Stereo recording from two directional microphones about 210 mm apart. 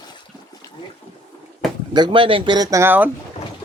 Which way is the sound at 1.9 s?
20° right (ahead or behind).